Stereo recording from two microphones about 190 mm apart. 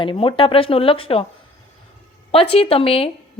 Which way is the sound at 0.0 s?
25° left (ahead or behind).